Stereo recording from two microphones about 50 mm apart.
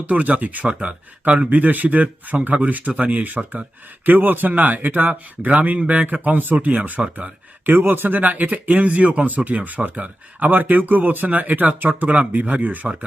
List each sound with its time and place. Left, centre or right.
0.0 s speech: right